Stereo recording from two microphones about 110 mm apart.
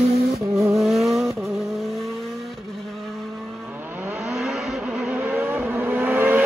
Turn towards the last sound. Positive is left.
turn(degrees=-15)  # may be behind; listen again after turning